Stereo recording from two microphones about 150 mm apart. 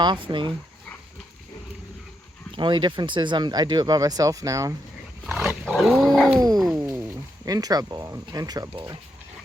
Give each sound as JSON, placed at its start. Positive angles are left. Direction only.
{"t": 0.0, "sound": "speech", "side_deg": -30}
{"t": 2.6, "sound": "speech", "side_deg": -30}
{"t": 5.2, "sound": "wild animals", "side_deg": 0}
{"t": 5.6, "sound": "dog", "side_deg": 5}
{"t": 6.7, "sound": "speech", "side_deg": -15}